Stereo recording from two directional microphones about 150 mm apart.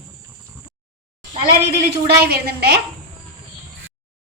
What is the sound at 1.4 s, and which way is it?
A woman's voice, 90° right.